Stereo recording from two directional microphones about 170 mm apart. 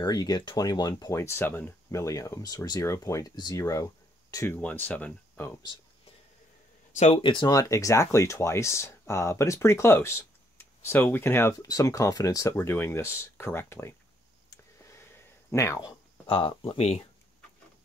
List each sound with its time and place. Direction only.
0.0 s speech: 25° left (ahead or behind)
7.0 s speech: 40° left (ahead or behind)
7.2 s speech: 25° left (ahead or behind)
14.5 s a sound: 15° left (ahead or behind)
15.5 s speech: 20° left (ahead or behind)
16.3 s speech: 30° left (ahead or behind)